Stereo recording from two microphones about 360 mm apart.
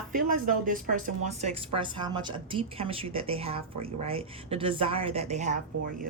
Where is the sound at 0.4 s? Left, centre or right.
Right.